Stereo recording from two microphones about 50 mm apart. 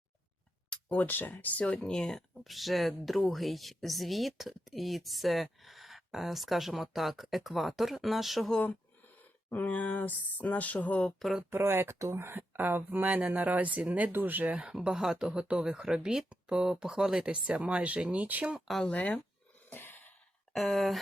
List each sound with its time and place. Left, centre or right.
0.9 s speech: left
1.9 s speech: centre
9.5 s speech: left
11.5 s speech: right
12.4 s speech: right
14.5 s speech: centre; by 18.4 s right
18.9 s speech: left
19.7 s a sound: left
20.5 s speech: centre